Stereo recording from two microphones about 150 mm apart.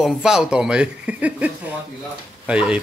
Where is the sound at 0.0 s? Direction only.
5° right (ahead or behind).